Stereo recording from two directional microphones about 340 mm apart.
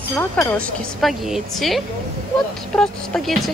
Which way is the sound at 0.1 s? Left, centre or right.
Centre.